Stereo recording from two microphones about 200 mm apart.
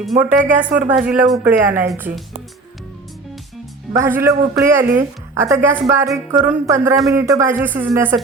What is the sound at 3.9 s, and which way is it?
A woman's voice, 10° right (ahead or behind).